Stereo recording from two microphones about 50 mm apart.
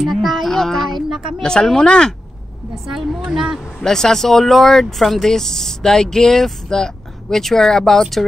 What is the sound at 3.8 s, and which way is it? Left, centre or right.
Speech, centre.